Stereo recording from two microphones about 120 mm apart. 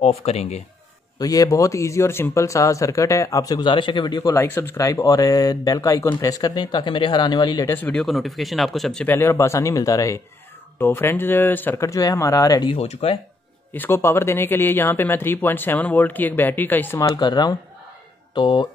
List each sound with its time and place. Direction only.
0.0 s speech: 60° left (ahead or behind)
1.2 s speech: 30° left (ahead or behind)
7.7 s speech: 15° left (ahead or behind)
8.0 s speech: centre (ahead or behind)
9.0 s speech: 20° left (ahead or behind)
12.7 s speech: 60° left (ahead or behind)
13.7 s speech: 20° left (ahead or behind)
17.1 s speech: 35° left (ahead or behind)